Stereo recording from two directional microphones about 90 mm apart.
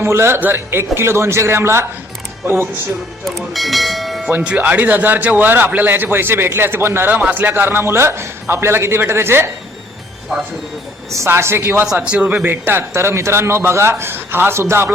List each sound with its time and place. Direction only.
0.0 s speech: 30° right (ahead or behind)
3.2 s speech: centre (ahead or behind)
4.3 s speech: 20° right (ahead or behind)
11.1 s speech: 30° right (ahead or behind)
11.9 s speech: 15° right (ahead or behind)